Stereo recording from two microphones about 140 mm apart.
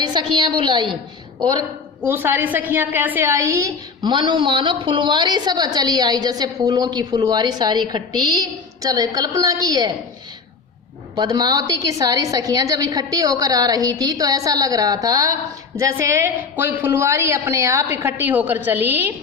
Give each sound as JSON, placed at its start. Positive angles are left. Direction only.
{"t": 0.0, "sound": "a woman's voice", "side_deg": -35}
{"t": 2.0, "sound": "a woman's voice", "side_deg": -15}
{"t": 11.1, "sound": "a woman's voice", "side_deg": -30}